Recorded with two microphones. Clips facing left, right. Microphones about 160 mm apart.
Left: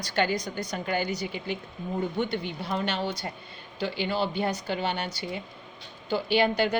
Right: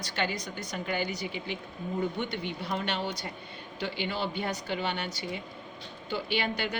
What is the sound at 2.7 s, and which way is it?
A woman's voice, 35° left (ahead or behind).